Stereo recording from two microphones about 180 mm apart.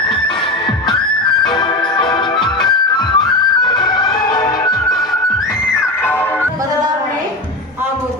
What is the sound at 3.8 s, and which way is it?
Music, 25° left (ahead or behind).